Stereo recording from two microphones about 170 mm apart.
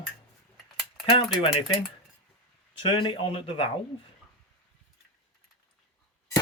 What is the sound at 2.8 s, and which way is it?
Speech, 30° left (ahead or behind).